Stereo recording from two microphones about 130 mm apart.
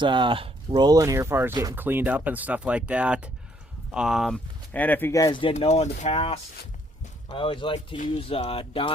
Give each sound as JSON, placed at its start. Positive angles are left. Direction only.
{"t": 0.0, "sound": "speech", "side_deg": -40}
{"t": 0.9, "sound": "speech", "side_deg": -25}
{"t": 4.7, "sound": "speech", "side_deg": 15}
{"t": 5.1, "sound": "speech", "side_deg": 35}
{"t": 5.5, "sound": "speech", "side_deg": 60}